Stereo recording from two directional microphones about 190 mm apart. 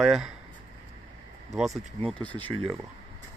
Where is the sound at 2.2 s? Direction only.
10° left (ahead or behind).